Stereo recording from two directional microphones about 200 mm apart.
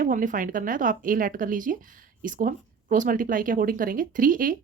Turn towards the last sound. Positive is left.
turn(degrees=-45)  # may be behind; listen again after turning